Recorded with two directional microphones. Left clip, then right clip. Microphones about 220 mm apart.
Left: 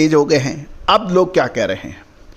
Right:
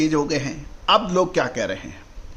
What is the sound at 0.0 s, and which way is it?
A man's voice, 35° left (ahead or behind).